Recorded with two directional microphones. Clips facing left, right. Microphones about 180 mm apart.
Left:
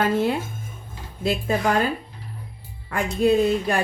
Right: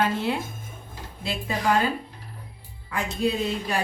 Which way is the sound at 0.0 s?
45° left (ahead or behind).